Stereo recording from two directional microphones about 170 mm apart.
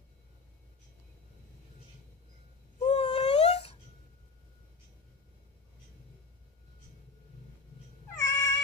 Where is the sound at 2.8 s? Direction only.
35° left (ahead or behind).